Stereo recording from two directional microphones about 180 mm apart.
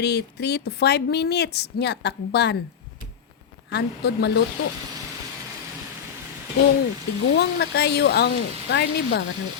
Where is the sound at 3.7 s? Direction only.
65° left (ahead or behind).